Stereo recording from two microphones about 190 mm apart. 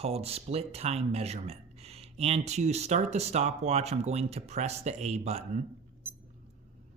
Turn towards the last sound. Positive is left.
turn(degrees=-10)  # may be behind; listen again after turning